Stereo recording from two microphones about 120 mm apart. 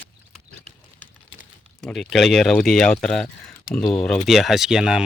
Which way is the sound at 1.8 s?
Centre (ahead or behind).